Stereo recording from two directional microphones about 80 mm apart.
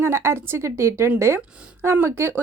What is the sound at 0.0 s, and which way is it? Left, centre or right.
A woman's voice, right.